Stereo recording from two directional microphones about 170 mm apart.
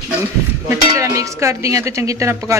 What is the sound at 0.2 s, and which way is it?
Cowbell, 15° right (ahead or behind).